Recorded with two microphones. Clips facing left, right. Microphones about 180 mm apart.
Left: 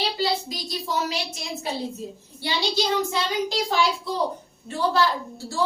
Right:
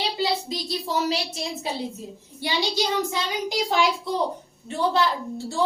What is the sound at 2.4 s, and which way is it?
A child's voice, 15° right (ahead or behind).